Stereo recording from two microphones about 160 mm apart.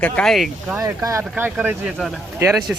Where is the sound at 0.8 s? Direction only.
20° right (ahead or behind).